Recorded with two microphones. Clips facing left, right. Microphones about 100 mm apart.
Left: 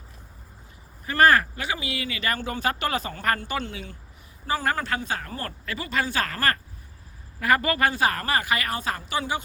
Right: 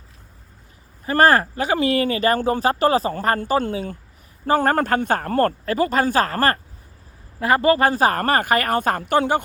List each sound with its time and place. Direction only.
1.0 s speech: 35° right (ahead or behind); by 9.4 s 55° right (ahead or behind)